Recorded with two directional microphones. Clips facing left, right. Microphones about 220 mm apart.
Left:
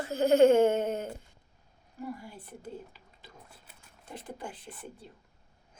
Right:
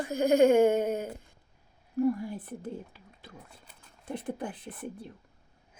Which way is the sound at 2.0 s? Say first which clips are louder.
Right 12 dB; 55° right (ahead or behind).